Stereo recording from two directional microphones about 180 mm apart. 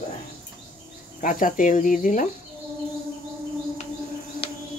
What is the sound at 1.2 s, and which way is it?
Speech, 45° left (ahead or behind).